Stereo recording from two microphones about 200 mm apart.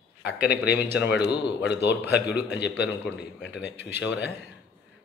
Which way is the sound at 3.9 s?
60° left (ahead or behind).